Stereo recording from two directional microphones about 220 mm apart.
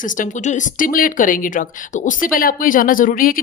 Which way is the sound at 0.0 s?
35° left (ahead or behind).